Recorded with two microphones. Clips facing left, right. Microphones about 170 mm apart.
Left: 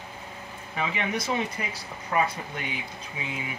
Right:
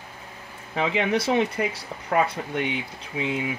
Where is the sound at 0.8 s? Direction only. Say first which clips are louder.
Right 6 dB; 85° right; by 1.6 s 70° right (ahead or behind).